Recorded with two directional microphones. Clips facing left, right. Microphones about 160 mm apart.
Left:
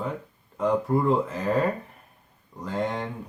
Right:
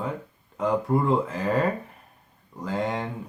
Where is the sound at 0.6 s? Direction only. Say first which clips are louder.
Even; centre (ahead or behind).